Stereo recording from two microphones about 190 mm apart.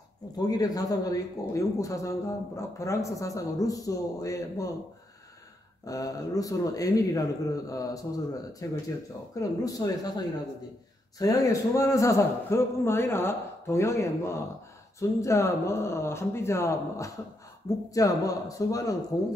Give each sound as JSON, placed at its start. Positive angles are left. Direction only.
{"t": 0.4, "sound": "a man's voice", "side_deg": 20}
{"t": 5.9, "sound": "a man's voice", "side_deg": 20}